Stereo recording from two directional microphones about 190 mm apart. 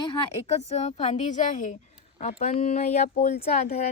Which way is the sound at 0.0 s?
30° left (ahead or behind).